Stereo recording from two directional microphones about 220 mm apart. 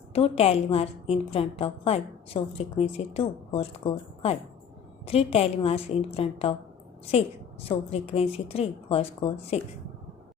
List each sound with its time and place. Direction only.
0.1 s a woman's voice: 25° left (ahead or behind)
7.7 s a woman's voice: 25° left (ahead or behind)